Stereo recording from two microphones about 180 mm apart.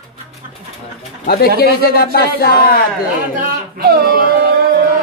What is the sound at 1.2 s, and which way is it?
A man's voice, 55° left (ahead or behind).